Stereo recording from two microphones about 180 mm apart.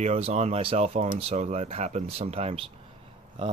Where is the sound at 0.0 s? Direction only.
40° right (ahead or behind).